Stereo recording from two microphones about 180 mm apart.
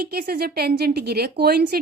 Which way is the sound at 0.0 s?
55° right (ahead or behind).